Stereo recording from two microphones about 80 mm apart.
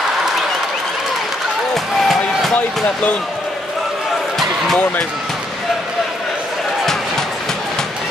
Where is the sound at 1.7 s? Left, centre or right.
Centre.